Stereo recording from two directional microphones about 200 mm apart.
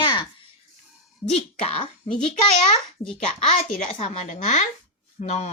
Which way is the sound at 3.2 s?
30° left (ahead or behind).